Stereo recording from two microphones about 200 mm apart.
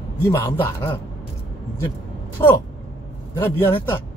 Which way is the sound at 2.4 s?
10° left (ahead or behind).